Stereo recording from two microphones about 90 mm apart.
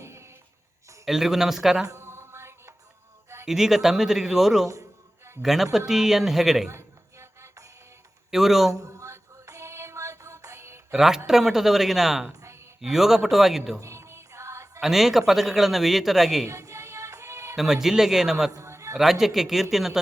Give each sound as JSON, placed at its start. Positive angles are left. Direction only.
{"t": 0.0, "sound": "music", "side_deg": -30}
{"t": 1.0, "sound": "speech", "side_deg": -5}
{"t": 1.9, "sound": "music", "side_deg": -30}
{"t": 3.4, "sound": "speech", "side_deg": -5}
{"t": 6.7, "sound": "a sound", "side_deg": -30}
{"t": 8.3, "sound": "speech", "side_deg": -5}
{"t": 8.7, "sound": "music", "side_deg": -35}
{"t": 10.9, "sound": "speech", "side_deg": -5}
{"t": 13.7, "sound": "music", "side_deg": -30}
{"t": 14.8, "sound": "speech", "side_deg": -5}
{"t": 16.5, "sound": "music", "side_deg": -35}
{"t": 17.6, "sound": "speech", "side_deg": -5}
{"t": 18.5, "sound": "a sound", "side_deg": -35}
{"t": 19.2, "sound": "speech", "side_deg": -5}